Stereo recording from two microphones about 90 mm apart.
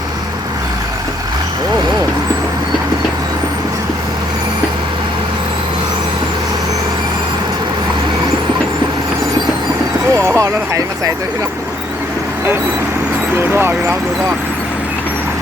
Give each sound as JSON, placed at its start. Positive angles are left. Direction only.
{"t": 10.2, "sound": "vehicle", "side_deg": -35}
{"t": 13.5, "sound": "speech", "side_deg": -25}